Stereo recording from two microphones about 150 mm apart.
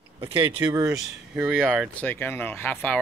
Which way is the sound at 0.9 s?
10° right (ahead or behind).